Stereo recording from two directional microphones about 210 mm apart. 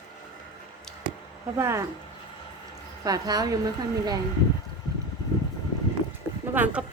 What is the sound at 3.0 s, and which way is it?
A woman's voice, 20° right (ahead or behind).